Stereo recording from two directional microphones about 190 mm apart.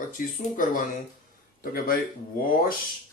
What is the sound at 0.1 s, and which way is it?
Speech, 45° left (ahead or behind).